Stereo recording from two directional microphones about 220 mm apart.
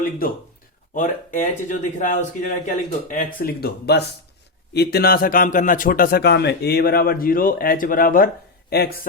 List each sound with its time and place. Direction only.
0.9 s a man's voice: 35° left (ahead or behind)